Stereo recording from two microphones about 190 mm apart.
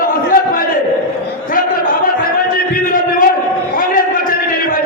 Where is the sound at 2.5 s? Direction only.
45° left (ahead or behind).